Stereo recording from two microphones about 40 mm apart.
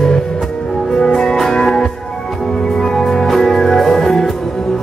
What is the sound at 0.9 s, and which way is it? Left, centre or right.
Music, centre.